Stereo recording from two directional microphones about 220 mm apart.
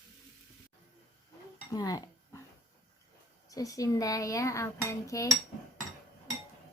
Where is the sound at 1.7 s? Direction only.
15° left (ahead or behind).